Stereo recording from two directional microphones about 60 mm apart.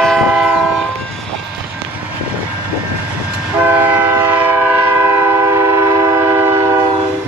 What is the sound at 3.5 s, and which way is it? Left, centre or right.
Train, right.